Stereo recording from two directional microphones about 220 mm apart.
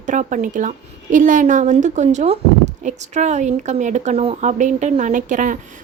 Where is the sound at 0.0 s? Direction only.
35° right (ahead or behind).